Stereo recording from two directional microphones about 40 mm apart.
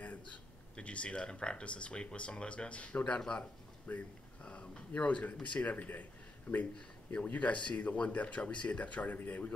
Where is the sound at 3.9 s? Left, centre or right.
Left.